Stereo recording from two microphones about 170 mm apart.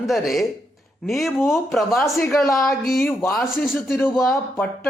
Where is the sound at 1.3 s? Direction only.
15° left (ahead or behind).